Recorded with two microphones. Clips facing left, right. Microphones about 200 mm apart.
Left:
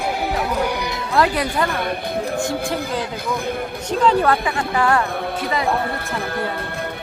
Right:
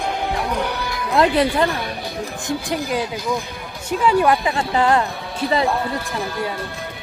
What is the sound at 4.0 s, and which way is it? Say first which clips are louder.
Speech: even; 10° right (ahead or behind).